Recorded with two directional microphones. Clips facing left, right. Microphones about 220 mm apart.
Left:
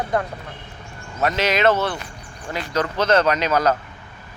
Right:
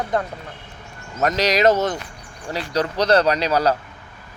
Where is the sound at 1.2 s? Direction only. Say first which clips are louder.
Right 2 dB; 40° right (ahead or behind).